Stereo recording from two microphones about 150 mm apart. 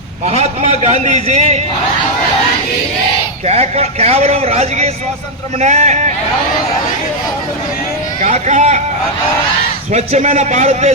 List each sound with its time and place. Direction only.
0.3 s a man's voice: 45° right (ahead or behind)
3.4 s a man's voice: 45° right (ahead or behind)
8.2 s a man's voice: 50° right (ahead or behind)
9.9 s a man's voice: 45° right (ahead or behind)